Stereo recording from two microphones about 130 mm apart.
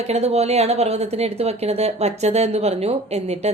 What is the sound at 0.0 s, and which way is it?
Speech, 55° right (ahead or behind).